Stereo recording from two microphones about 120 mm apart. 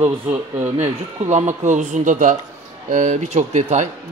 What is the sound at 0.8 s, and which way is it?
Speech, 75° right (ahead or behind).